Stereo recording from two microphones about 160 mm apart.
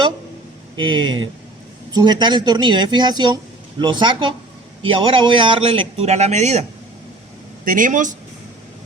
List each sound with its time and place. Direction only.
0.8 s a man's voice: 30° right (ahead or behind)
7.6 s speech: 55° right (ahead or behind)